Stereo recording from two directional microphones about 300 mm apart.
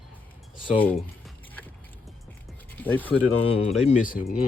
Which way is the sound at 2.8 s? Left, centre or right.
Centre.